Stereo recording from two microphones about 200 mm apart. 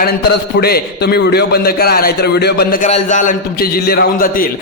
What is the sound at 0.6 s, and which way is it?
A man's voice, 50° left (ahead or behind).